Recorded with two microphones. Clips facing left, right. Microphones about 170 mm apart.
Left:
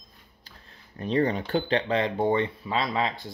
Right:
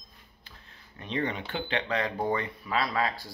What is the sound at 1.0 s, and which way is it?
Speech, 35° left (ahead or behind).